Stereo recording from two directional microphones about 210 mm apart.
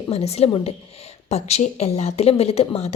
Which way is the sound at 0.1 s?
30° left (ahead or behind).